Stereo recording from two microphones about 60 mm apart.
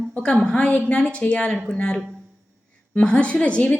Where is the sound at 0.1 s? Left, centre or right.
Centre.